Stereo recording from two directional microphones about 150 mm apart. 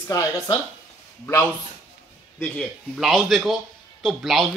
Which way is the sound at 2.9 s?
Centre (ahead or behind).